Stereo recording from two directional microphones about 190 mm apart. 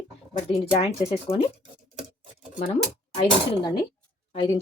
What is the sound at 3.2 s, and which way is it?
Speech, 25° left (ahead or behind).